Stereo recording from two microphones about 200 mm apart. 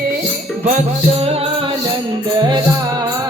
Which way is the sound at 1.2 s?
30° right (ahead or behind).